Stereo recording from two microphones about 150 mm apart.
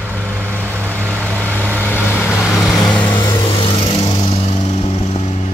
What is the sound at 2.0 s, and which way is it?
Vehicle, 15° left (ahead or behind).